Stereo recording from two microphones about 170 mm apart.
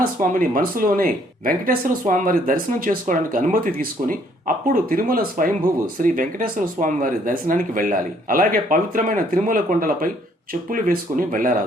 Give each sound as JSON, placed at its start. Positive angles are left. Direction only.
{"t": 0.0, "sound": "speech", "side_deg": -55}